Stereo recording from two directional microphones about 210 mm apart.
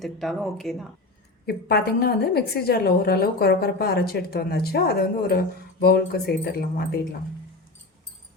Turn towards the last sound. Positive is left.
turn(degrees=45)  # may be behind; listen again after turning